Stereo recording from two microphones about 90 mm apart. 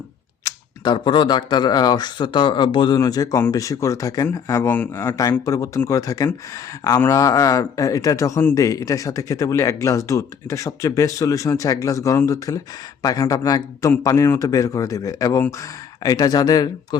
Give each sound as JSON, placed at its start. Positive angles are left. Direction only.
{"t": 0.4, "sound": "camera", "side_deg": 40}
{"t": 0.9, "sound": "a man's voice", "side_deg": 60}
{"t": 3.0, "sound": "speech", "side_deg": 40}
{"t": 5.5, "sound": "speech", "side_deg": 35}